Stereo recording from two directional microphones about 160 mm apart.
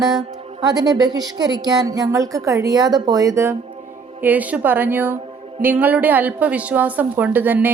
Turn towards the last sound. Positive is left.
turn(degrees=-10)  # may be behind; listen again after turning